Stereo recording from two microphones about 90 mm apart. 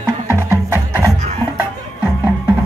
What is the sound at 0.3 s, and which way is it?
Music, 25° right (ahead or behind).